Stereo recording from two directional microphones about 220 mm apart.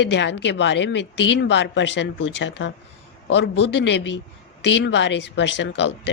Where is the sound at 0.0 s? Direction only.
55° left (ahead or behind).